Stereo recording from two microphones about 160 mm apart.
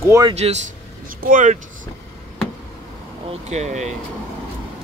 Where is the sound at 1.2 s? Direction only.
55° right (ahead or behind).